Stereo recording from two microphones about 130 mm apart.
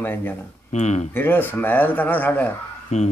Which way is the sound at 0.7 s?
60° left (ahead or behind).